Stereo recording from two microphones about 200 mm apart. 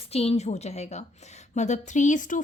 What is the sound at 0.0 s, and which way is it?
A woman's voice, 30° left (ahead or behind).